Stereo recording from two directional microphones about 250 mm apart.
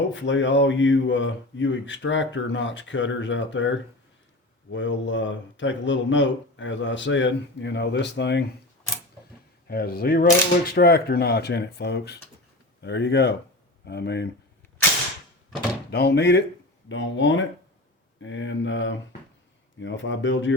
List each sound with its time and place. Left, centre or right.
0.1 s speech: left
9.6 s speech: left
15.9 s speech: left